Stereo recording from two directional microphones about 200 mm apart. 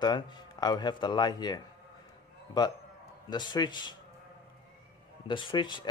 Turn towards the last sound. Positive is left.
turn(degrees=25)  # may be behind; listen again after turning